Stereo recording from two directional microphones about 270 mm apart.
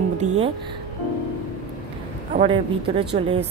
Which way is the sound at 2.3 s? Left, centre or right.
Right.